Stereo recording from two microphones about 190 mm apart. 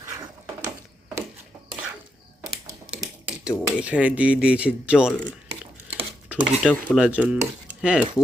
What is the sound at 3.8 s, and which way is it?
Speech, 5° right (ahead or behind).